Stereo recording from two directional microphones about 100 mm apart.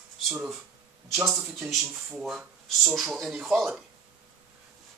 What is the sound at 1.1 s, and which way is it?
Speech, 5° right (ahead or behind).